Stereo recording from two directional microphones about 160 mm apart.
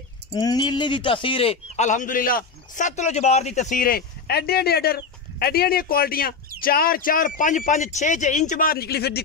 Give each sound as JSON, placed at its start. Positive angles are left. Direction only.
{"t": 0.3, "sound": "speech", "side_deg": 25}
{"t": 1.9, "sound": "a man's voice", "side_deg": 55}